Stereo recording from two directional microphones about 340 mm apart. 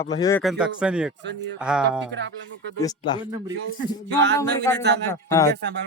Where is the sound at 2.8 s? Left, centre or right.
Centre.